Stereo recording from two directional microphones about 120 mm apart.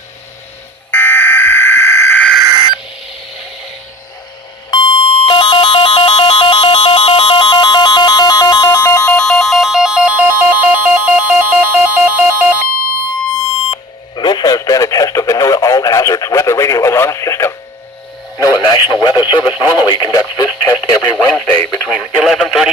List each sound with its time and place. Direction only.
0.9 s fire alarm: 15° left (ahead or behind)
4.7 s a sound: 50° left (ahead or behind)
8.8 s a sound: 25° left (ahead or behind)
9.0 s ringtone: 5° left (ahead or behind); by 12.6 s 15° right (ahead or behind)
14.2 s radio: 35° left (ahead or behind)
21.2 s radio: 10° left (ahead or behind)
21.8 s radio: 5° right (ahead or behind)